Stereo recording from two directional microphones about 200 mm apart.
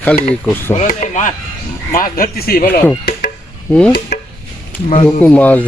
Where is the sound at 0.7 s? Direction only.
35° left (ahead or behind).